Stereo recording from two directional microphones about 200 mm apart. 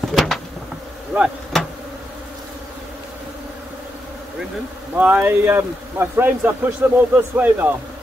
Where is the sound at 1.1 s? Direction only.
5° right (ahead or behind).